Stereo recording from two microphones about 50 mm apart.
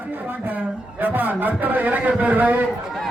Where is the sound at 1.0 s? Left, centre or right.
Right.